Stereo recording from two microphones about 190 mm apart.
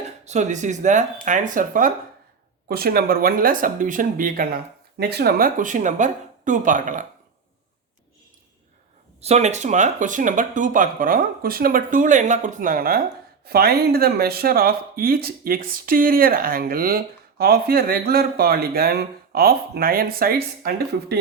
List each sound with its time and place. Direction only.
0.3 s speech: 40° right (ahead or behind)
9.2 s speech: 35° right (ahead or behind); by 21.2 s 55° right (ahead or behind)